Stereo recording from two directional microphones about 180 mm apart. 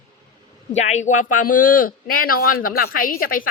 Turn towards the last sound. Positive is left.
turn(degrees=50)  # may be behind; listen again after turning